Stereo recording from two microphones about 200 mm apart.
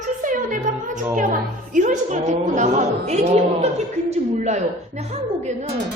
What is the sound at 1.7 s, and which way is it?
A woman's voice, 40° right (ahead or behind).